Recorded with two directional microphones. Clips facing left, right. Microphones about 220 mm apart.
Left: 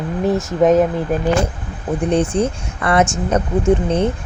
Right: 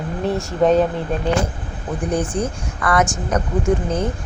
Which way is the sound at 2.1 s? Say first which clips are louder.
Left 4 dB; 25° left (ahead or behind).